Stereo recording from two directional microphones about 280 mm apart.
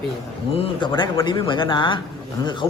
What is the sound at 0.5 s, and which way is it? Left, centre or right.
Speech, centre.